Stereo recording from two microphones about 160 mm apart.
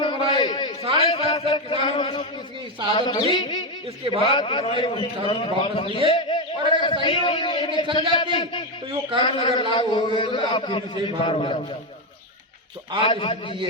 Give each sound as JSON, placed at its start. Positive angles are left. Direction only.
{"t": 0.0, "sound": "a sound", "side_deg": 30}
{"t": 2.9, "sound": "a man's voice", "side_deg": 30}
{"t": 4.0, "sound": "a man's voice", "side_deg": -35}
{"t": 4.3, "sound": "a man's voice", "side_deg": 35}
{"t": 6.1, "sound": "a sound", "side_deg": 30}
{"t": 6.8, "sound": "a man's voice", "side_deg": 35}
{"t": 13.0, "sound": "a man's voice", "side_deg": 35}